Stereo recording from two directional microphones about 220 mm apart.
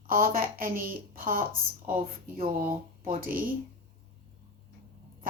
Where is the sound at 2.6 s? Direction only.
40° right (ahead or behind).